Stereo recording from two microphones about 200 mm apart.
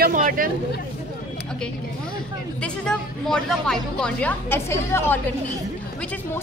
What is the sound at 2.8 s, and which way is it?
A woman's voice, 5° left (ahead or behind).